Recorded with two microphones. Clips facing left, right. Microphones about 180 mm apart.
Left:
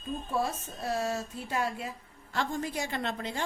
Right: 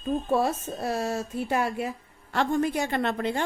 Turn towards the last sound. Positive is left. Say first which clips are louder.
# right 7 dB
turn(degrees=-60)  # may be behind; listen again after turning